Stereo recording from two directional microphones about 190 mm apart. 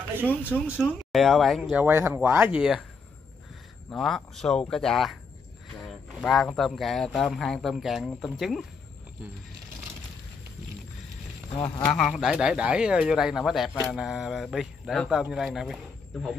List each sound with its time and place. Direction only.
0.3 s speech: 10° left (ahead or behind)
0.7 s speech: centre (ahead or behind)
3.9 s speech: centre (ahead or behind)
6.2 s speech: 5° left (ahead or behind)
11.5 s speech: 20° left (ahead or behind)
11.8 s speech: 5° left (ahead or behind)